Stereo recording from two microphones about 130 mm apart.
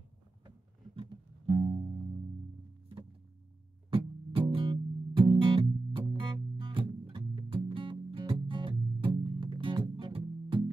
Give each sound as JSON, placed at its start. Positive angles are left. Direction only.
{"t": 0.9, "sound": "music", "side_deg": -45}
{"t": 3.9, "sound": "music", "side_deg": -40}